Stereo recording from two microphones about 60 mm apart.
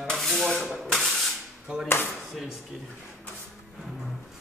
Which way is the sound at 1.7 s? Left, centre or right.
Centre.